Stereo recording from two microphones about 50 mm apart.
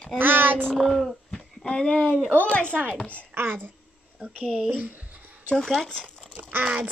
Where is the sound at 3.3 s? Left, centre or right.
Right.